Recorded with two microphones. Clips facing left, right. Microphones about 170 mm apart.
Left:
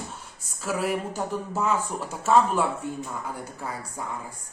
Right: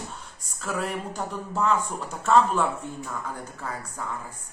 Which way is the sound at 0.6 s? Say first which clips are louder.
Left 3 dB; 5° left (ahead or behind).